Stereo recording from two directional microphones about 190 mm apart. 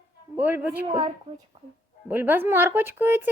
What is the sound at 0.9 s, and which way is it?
Speech, 30° right (ahead or behind).